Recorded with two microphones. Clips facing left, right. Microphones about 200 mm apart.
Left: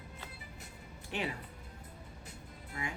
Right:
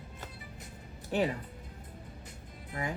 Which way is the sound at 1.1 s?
40° right (ahead or behind).